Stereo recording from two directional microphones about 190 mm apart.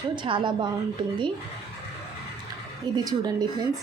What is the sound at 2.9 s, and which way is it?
Speech, 20° right (ahead or behind).